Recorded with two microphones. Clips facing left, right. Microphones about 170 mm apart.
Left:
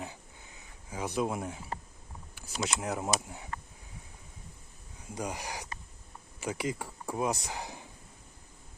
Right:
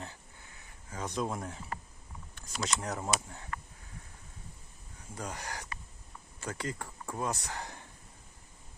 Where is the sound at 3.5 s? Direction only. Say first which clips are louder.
Even; 25° left (ahead or behind).